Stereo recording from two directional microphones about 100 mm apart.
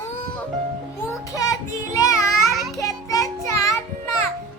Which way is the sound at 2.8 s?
35° left (ahead or behind).